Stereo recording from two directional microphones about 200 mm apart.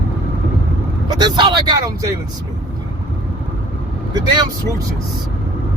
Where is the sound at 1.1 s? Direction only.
20° right (ahead or behind).